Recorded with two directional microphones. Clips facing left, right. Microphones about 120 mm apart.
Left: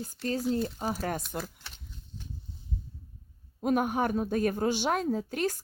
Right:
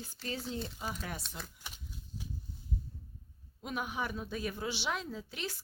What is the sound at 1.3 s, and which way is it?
Speech, 60° left (ahead or behind).